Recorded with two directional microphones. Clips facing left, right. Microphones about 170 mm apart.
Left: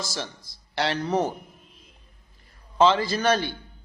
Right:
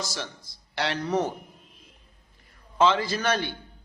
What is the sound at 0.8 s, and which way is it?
Speech, 30° left (ahead or behind).